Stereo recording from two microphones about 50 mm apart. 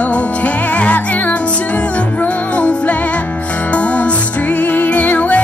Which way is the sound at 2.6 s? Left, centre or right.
Left.